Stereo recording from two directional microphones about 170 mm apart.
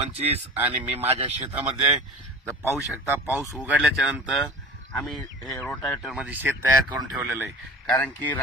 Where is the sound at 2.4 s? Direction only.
15° left (ahead or behind).